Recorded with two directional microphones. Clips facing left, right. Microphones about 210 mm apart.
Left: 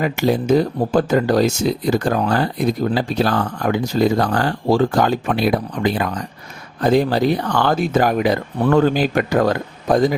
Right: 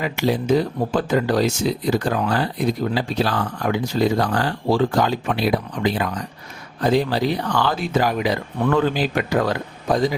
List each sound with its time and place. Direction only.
0.0 s speech: 45° left (ahead or behind)